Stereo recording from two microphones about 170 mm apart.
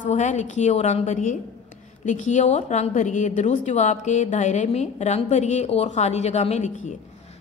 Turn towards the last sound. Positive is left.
turn(degrees=40)  # may be behind; listen again after turning